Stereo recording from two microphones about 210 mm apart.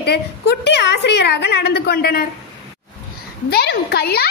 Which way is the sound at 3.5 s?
50° left (ahead or behind).